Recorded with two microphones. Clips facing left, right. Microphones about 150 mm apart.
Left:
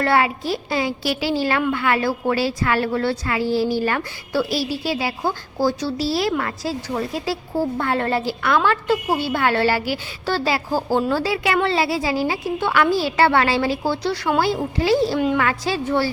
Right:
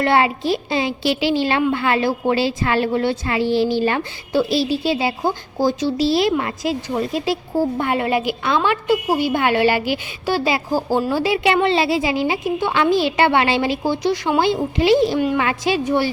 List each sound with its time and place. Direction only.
0.0 s a woman's voice: 20° right (ahead or behind)